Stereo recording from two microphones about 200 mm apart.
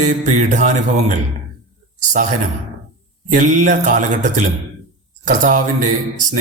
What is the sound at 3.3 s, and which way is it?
A man's voice, 40° right (ahead or behind).